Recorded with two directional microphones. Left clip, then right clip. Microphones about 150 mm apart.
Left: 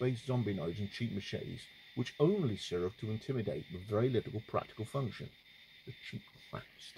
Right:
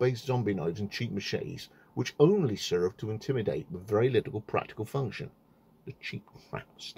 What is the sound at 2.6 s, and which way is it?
Speech, 20° left (ahead or behind).